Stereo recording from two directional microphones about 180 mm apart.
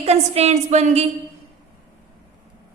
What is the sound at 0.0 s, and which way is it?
A woman's voice, 35° right (ahead or behind).